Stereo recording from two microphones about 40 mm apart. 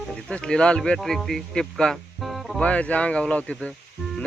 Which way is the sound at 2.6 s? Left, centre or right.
Left.